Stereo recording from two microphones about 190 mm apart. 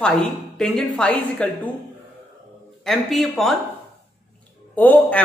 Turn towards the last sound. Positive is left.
turn(degrees=10)  # may be behind; listen again after turning